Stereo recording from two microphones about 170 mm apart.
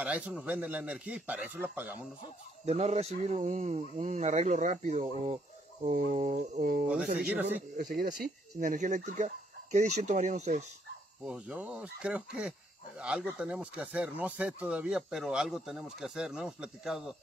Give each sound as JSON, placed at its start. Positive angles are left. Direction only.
{"t": 0.0, "sound": "a man's voice", "side_deg": -5}
{"t": 2.6, "sound": "speech", "side_deg": -40}
{"t": 7.2, "sound": "a man's voice", "side_deg": -5}
{"t": 7.7, "sound": "speech", "side_deg": -50}
{"t": 11.2, "sound": "speech", "side_deg": -5}